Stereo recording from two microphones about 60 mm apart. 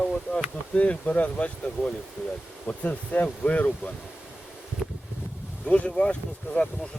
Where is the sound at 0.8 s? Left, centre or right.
Left.